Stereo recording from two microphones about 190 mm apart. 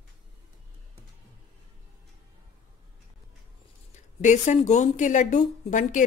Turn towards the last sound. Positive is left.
turn(degrees=40)  # may be behind; listen again after turning